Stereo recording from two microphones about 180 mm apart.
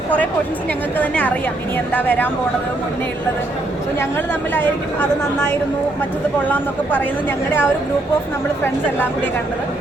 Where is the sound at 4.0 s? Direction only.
10° left (ahead or behind).